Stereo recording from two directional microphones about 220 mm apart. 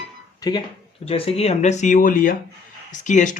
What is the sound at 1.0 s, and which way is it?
Speech, 25° left (ahead or behind).